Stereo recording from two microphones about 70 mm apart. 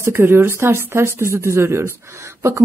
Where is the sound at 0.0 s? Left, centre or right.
Right.